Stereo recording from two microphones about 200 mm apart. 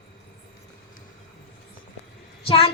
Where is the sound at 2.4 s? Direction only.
30° left (ahead or behind).